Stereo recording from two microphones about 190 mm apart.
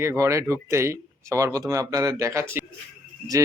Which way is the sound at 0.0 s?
15° right (ahead or behind).